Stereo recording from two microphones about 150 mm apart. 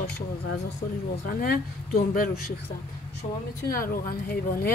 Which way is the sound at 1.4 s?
75° left (ahead or behind).